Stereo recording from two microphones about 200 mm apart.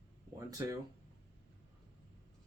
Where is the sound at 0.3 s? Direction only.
15° right (ahead or behind).